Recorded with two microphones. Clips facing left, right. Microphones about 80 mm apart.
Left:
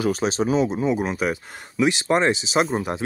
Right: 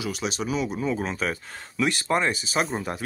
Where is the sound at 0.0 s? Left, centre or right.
Left.